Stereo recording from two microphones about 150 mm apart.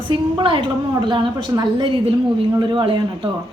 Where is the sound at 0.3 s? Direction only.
30° right (ahead or behind).